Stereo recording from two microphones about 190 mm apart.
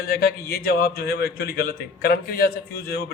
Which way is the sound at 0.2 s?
55° left (ahead or behind).